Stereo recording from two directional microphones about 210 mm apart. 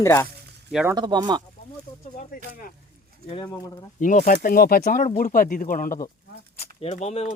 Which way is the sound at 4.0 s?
40° left (ahead or behind).